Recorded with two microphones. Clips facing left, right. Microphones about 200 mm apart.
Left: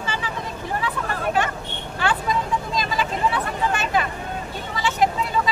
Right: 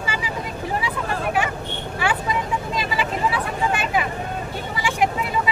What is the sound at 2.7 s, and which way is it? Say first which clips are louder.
Vehicle: even; 10° right (ahead or behind).